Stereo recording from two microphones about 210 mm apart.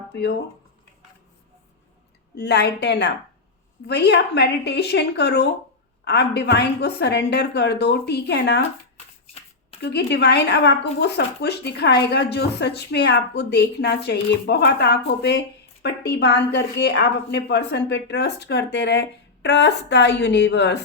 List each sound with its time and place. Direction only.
0.1 s speech: 55° left (ahead or behind)
2.3 s speech: 55° left (ahead or behind)
9.8 s a woman's voice: 55° left (ahead or behind)